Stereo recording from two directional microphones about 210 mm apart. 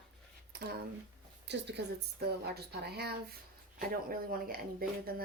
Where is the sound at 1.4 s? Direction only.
55° right (ahead or behind).